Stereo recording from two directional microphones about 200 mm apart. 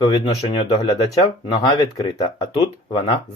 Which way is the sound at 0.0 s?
25° left (ahead or behind).